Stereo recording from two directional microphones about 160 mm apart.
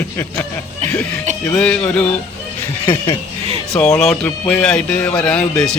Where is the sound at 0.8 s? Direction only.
45° right (ahead or behind).